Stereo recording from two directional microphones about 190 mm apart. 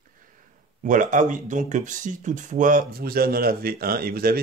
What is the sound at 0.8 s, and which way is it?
Speech, 45° right (ahead or behind).